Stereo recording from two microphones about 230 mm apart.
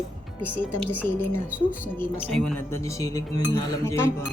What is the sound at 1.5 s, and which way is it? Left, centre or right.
Speech, centre.